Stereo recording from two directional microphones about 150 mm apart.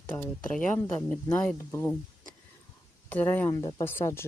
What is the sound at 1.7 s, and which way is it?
Speech, 15° left (ahead or behind).